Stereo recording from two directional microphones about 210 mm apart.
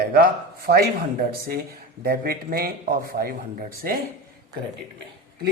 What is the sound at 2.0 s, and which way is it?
A woman's voice, 45° right (ahead or behind).